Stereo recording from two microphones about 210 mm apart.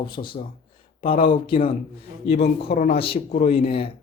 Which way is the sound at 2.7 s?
45° left (ahead or behind).